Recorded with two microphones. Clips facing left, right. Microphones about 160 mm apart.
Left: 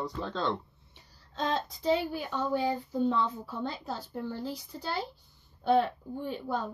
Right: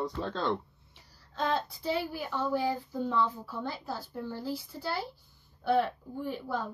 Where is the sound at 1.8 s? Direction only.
20° left (ahead or behind).